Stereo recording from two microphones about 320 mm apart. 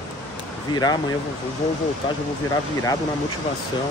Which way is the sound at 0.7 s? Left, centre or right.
Centre.